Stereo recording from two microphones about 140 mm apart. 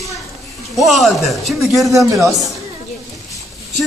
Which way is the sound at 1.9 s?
20° right (ahead or behind).